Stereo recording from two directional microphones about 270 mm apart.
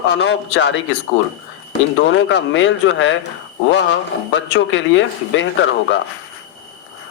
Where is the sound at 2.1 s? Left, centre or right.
Left.